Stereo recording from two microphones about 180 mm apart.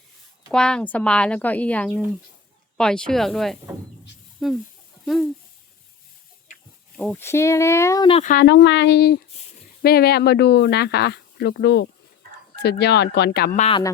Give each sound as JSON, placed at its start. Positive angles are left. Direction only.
{"t": 0.5, "sound": "speech", "side_deg": 5}
{"t": 6.9, "sound": "speech", "side_deg": 10}
{"t": 8.2, "sound": "speech", "side_deg": 50}
{"t": 8.4, "sound": "speech", "side_deg": 70}
{"t": 13.6, "sound": "speech", "side_deg": 30}